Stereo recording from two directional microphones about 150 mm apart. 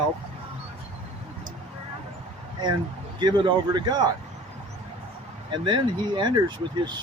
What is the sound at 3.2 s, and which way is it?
Speech, 30° right (ahead or behind).